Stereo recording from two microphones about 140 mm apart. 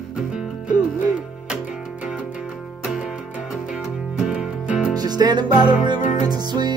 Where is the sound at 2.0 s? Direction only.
10° right (ahead or behind).